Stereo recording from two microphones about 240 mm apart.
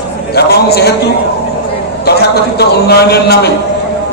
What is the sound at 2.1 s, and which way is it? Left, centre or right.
A man's voice, left.